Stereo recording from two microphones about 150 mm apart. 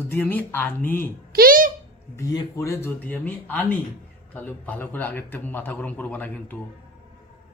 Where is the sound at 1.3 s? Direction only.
70° right (ahead or behind).